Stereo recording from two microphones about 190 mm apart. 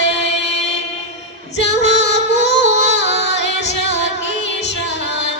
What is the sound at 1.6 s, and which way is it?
Music, 65° left (ahead or behind).